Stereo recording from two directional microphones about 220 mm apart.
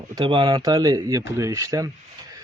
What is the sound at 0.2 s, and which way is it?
Speech, 20° right (ahead or behind).